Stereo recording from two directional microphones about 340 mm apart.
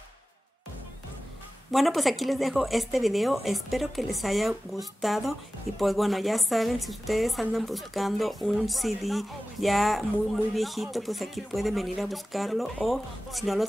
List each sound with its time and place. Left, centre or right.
1.7 s a woman's voice: centre